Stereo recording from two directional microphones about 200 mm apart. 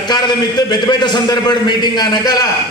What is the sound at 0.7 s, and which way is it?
A man's voice, 20° left (ahead or behind).